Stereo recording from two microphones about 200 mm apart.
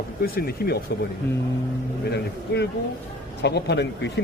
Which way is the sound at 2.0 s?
55° left (ahead or behind).